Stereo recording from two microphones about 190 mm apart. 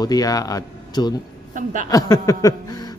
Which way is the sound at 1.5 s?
45° right (ahead or behind).